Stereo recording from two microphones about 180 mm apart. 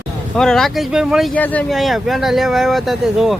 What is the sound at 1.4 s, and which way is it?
Speech, 10° left (ahead or behind).